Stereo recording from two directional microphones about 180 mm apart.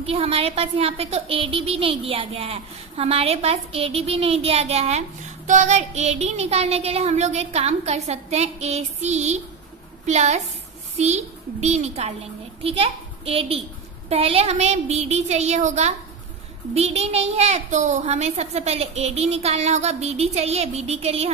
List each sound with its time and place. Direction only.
0.0 s a child's voice: 35° right (ahead or behind)